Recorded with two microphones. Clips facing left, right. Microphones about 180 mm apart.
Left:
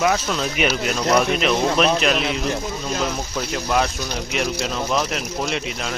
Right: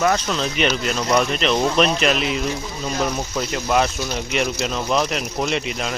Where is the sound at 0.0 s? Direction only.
5° left (ahead or behind).